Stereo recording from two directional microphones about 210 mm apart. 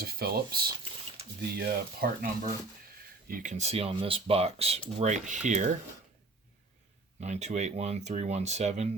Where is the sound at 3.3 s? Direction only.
40° right (ahead or behind).